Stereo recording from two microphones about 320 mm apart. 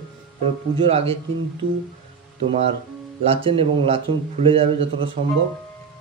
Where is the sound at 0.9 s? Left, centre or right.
Centre.